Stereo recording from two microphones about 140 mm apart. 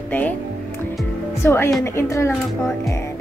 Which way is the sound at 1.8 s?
20° left (ahead or behind).